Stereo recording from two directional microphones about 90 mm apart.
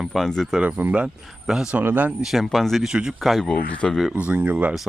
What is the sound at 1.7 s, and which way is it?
Speech, 20° right (ahead or behind).